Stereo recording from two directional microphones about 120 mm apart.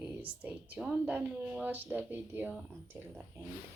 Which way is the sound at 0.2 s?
15° right (ahead or behind).